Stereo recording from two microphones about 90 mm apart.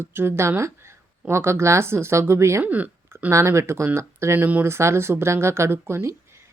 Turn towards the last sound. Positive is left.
turn(degrees=-30)  # may be behind; listen again after turning